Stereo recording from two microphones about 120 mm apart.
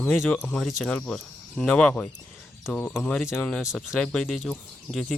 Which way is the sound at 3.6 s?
5° right (ahead or behind).